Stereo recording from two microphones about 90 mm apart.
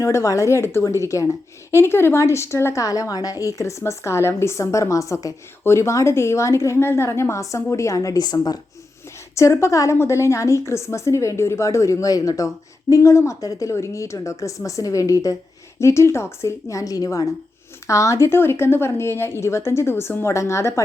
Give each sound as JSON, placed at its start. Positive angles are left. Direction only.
{"t": 0.0, "sound": "a woman's voice", "side_deg": 35}
{"t": 9.3, "sound": "a woman's voice", "side_deg": 35}